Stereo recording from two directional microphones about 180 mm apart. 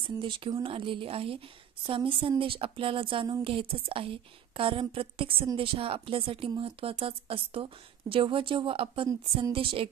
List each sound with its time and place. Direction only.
0.0 s a woman's voice: 30° right (ahead or behind)